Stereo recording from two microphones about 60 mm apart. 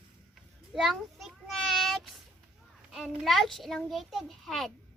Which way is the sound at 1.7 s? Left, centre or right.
Centre.